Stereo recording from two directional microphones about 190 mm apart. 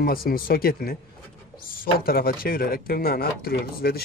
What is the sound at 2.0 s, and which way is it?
Speech, 50° left (ahead or behind).